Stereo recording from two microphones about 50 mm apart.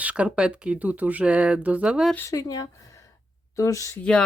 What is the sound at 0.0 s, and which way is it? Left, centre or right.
Speech, right.